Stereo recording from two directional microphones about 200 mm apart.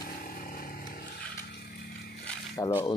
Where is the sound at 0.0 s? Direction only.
45° left (ahead or behind).